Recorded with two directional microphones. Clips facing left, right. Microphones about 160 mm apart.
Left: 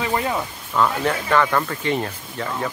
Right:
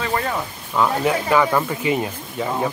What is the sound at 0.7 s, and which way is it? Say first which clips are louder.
Speech: right 2 dB; 10° right (ahead or behind).